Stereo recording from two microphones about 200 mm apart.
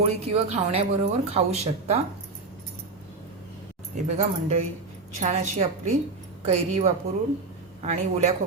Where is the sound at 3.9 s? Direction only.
35° right (ahead or behind).